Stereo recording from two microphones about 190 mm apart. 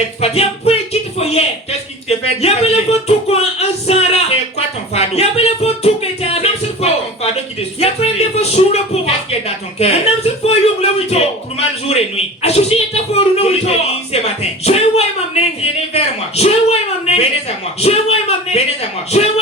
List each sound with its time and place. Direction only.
0.2 s music: 35° left (ahead or behind)
1.2 s a woman's voice: 30° left (ahead or behind)
7.8 s a man's voice: 35° left (ahead or behind)